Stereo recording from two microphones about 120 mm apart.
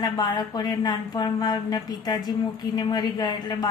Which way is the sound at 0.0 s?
35° left (ahead or behind).